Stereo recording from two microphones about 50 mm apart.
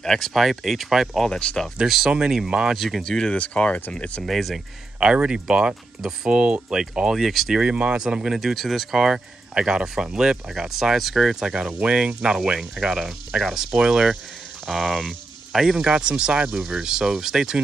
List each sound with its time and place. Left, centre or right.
0.0 s speech: centre
0.4 s speech: centre
1.3 s speech: centre
1.9 s speech: centre
2.7 s speech: centre
3.0 s speech: centre
4.3 s speech: centre
5.0 s speech: centre
7.5 s speech: right
8.0 s speech: centre
9.0 s speech: centre
14.7 s speech: centre
15.9 s speech: centre